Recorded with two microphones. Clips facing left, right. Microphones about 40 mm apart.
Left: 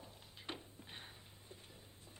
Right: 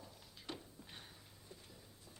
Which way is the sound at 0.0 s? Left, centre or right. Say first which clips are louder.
Left 2 dB; left.